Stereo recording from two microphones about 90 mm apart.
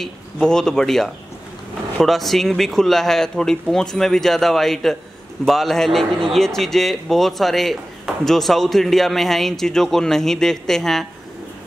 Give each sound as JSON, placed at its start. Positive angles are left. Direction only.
{"t": 0.0, "sound": "speech", "side_deg": 5}